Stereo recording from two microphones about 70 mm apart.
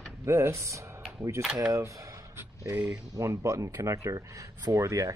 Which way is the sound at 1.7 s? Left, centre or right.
Right.